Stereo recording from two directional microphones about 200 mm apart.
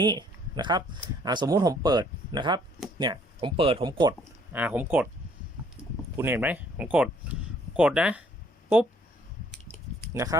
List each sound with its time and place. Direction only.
0.0 s speech: 20° right (ahead or behind)
4.5 s speech: 10° right (ahead or behind)
6.1 s speech: 10° right (ahead or behind)